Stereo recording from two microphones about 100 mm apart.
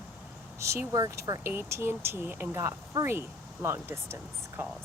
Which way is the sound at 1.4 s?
25° right (ahead or behind).